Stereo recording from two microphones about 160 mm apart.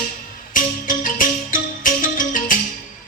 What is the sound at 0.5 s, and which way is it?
Music, 60° left (ahead or behind).